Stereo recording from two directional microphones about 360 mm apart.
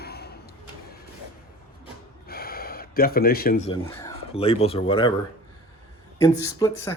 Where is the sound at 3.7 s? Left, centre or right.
Centre.